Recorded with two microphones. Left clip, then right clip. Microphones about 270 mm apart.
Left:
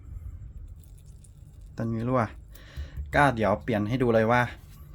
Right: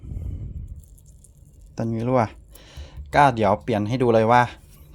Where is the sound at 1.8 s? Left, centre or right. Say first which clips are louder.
Right 6 dB; centre.